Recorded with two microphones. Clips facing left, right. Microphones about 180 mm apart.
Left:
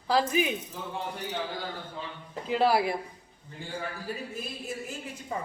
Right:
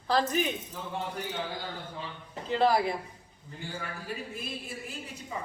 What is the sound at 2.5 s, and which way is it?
Speech, 10° left (ahead or behind).